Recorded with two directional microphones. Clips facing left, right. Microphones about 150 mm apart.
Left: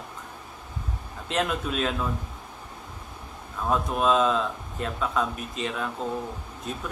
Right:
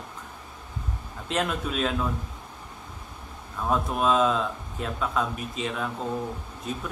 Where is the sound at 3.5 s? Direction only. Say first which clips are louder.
Even; centre (ahead or behind).